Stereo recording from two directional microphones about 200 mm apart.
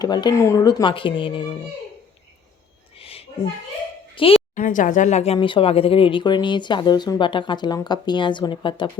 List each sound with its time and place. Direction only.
0.0 s speech: 20° left (ahead or behind)
3.0 s a sound: 30° left (ahead or behind)
4.1 s speech: 25° left (ahead or behind)
4.5 s speech: 40° left (ahead or behind); by 8.9 s 25° left (ahead or behind)